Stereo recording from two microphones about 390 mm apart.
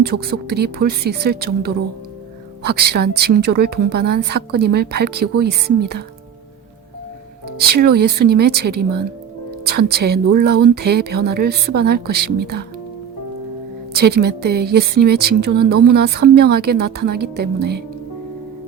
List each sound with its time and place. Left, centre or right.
0.0 s speech: right
7.6 s speech: right
13.9 s speech: right